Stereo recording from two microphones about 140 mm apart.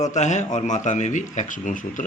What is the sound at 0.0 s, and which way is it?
Speech, 55° left (ahead or behind).